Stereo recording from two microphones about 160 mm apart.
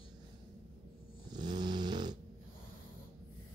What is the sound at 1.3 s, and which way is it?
Dog, 25° right (ahead or behind).